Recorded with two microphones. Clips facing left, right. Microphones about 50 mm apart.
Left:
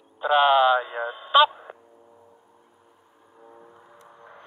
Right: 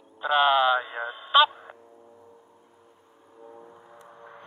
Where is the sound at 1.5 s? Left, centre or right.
Centre.